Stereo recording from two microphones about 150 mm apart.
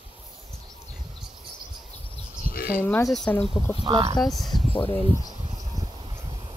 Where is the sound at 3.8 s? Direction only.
30° right (ahead or behind).